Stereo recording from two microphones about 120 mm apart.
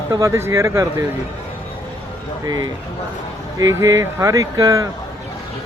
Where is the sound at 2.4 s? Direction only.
35° right (ahead or behind).